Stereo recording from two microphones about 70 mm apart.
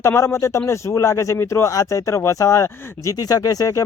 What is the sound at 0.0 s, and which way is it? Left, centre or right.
Speech, left.